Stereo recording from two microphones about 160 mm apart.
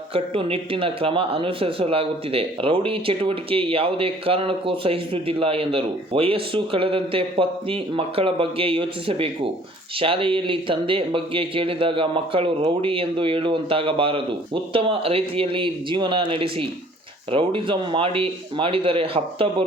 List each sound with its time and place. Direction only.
0.1 s speech: 35° right (ahead or behind)